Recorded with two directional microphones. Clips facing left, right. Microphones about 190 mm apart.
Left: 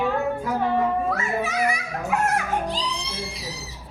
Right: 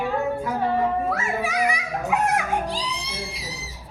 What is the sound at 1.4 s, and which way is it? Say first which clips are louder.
Music: even; 15° right (ahead or behind).